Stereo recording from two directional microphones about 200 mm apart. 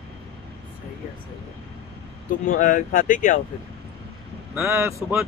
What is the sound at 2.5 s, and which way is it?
Speech, 40° left (ahead or behind).